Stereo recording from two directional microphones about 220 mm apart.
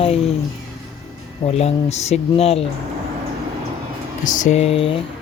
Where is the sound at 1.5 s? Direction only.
30° left (ahead or behind).